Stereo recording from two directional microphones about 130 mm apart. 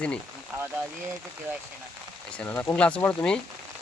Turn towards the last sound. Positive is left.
turn(degrees=10)  # may be behind; listen again after turning